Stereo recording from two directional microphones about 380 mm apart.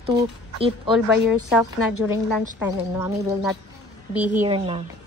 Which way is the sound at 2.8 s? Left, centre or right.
Centre.